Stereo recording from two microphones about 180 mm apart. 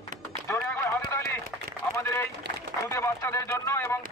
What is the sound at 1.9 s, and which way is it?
Boat, 15° left (ahead or behind).